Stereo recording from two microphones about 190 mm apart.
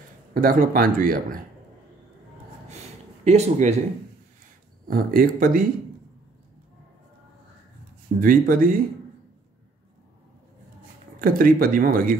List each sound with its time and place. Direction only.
0.3 s speech: 45° right (ahead or behind)
3.3 s speech: 35° right (ahead or behind)
4.8 s speech: 50° right (ahead or behind)
8.2 s speech: 50° right (ahead or behind)
11.1 s speech: 50° right (ahead or behind)